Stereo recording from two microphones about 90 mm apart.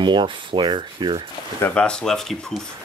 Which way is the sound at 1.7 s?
10° left (ahead or behind).